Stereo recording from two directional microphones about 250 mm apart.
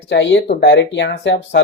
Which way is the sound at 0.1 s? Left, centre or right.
Left.